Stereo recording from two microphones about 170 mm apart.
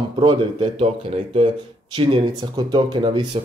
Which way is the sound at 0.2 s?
30° right (ahead or behind).